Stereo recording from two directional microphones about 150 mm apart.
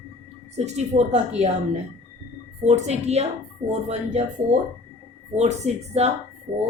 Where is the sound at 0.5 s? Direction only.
45° right (ahead or behind).